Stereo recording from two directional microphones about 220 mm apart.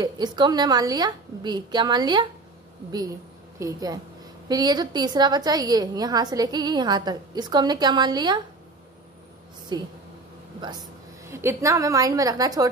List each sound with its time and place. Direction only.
0.0 s a woman's voice: 20° right (ahead or behind)
3.5 s a woman's voice: 15° right (ahead or behind)
9.7 s a woman's voice: 20° right (ahead or behind)